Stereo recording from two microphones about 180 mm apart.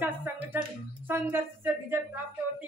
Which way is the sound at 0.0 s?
10° right (ahead or behind).